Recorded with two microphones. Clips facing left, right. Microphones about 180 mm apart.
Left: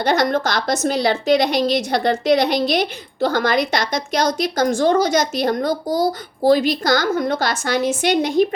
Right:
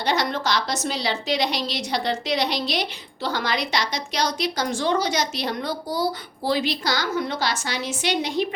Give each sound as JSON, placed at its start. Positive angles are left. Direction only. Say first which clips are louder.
{"t": 0.0, "sound": "a woman's voice", "louder": "left 6 dB", "side_deg": 50}